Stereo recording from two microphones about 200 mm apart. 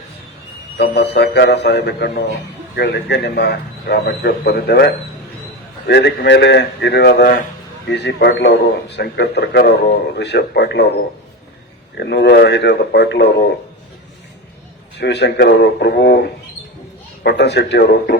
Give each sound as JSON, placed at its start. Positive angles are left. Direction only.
{"t": 0.8, "sound": "a man's voice", "side_deg": 55}
{"t": 5.9, "sound": "a man's voice", "side_deg": 55}
{"t": 11.9, "sound": "a man's voice", "side_deg": 55}
{"t": 14.9, "sound": "a man's voice", "side_deg": 60}
{"t": 17.2, "sound": "a man's voice", "side_deg": 60}